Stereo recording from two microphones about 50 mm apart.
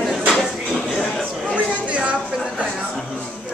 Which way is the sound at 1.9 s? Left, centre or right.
Right.